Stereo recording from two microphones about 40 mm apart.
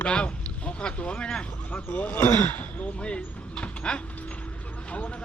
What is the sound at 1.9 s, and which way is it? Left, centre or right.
Speech, left.